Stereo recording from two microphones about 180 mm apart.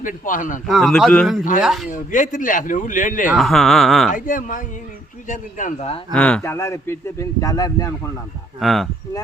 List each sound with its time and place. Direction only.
0.0 s speech: 45° left (ahead or behind)
0.7 s speech: centre (ahead or behind)
1.9 s speech: 45° left (ahead or behind)
3.3 s speech: centre (ahead or behind)
4.1 s speech: 45° left (ahead or behind)
6.1 s speech: 5° left (ahead or behind)
8.6 s speech: centre (ahead or behind)